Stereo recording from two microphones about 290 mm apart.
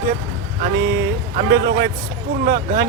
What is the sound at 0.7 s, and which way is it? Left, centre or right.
Speech, right.